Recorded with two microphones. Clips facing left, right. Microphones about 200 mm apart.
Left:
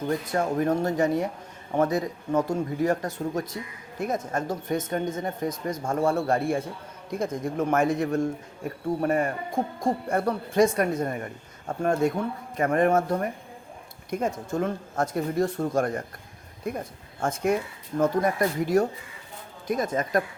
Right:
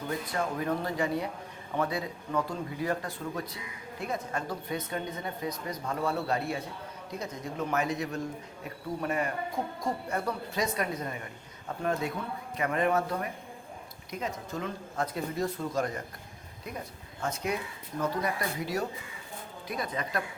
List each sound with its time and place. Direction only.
0.1 s speech: 45° left (ahead or behind)